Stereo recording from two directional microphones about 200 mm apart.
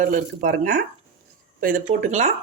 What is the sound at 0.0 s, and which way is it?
Speech, 45° right (ahead or behind).